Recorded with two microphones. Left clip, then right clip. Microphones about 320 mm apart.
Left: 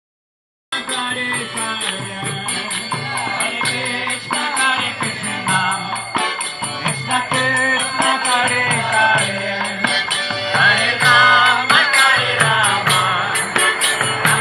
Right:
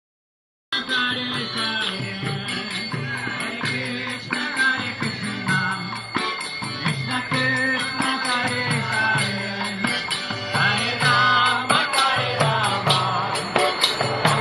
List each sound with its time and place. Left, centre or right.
4.3 s music: centre
6.8 s music: centre
13.5 s music: centre